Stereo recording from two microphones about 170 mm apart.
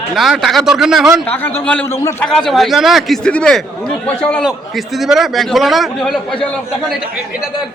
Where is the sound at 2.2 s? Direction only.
Centre (ahead or behind).